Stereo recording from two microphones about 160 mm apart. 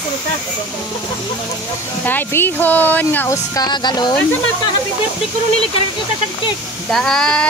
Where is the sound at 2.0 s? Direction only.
10° left (ahead or behind).